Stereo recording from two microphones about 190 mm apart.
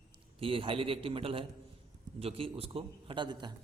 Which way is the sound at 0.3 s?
30° right (ahead or behind).